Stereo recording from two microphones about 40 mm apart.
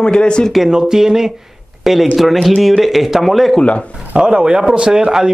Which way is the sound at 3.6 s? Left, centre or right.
Left.